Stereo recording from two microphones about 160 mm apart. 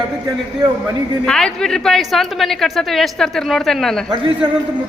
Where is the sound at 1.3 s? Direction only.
5° left (ahead or behind).